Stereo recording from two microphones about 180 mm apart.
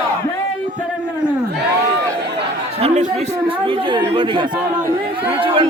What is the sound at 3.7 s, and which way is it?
Chatter, 30° right (ahead or behind).